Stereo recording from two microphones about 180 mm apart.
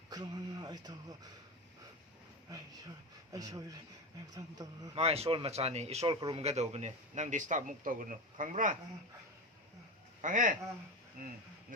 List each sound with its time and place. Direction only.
0.1 s speech: 20° right (ahead or behind)
3.3 s a man's voice: 20° right (ahead or behind)
4.9 s speech: 35° right (ahead or behind)
6.1 s a man's voice: 25° right (ahead or behind)
6.4 s a man's voice: 35° right (ahead or behind)
10.2 s a man's voice: 45° right (ahead or behind)